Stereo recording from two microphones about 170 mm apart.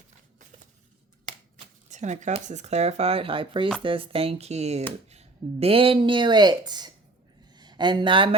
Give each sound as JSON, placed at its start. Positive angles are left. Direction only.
{"t": 1.9, "sound": "speech", "side_deg": -45}